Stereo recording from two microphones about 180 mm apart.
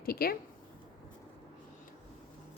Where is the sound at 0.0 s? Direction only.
55° left (ahead or behind).